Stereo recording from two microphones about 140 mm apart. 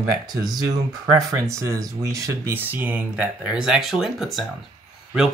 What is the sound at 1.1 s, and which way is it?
Speech, 20° right (ahead or behind).